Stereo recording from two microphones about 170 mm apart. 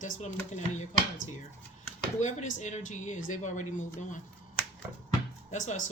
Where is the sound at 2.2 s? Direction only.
45° left (ahead or behind).